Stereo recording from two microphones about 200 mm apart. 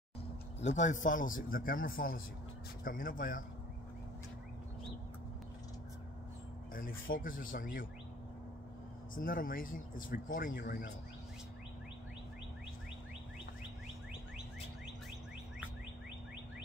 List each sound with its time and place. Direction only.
0.6 s speech: 35° left (ahead or behind)
6.7 s speech: 45° left (ahead or behind)
9.1 s speech: 45° left (ahead or behind)